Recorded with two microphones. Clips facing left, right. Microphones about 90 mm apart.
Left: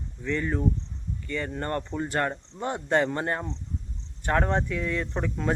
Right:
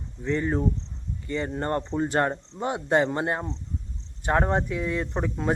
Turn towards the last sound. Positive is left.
turn(degrees=-15)  # may be behind; listen again after turning